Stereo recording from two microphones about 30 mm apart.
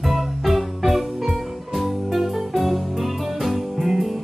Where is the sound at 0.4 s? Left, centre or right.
Centre.